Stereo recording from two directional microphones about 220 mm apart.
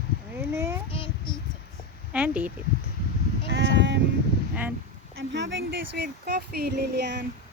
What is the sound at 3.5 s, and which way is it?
Speech, 50° right (ahead or behind).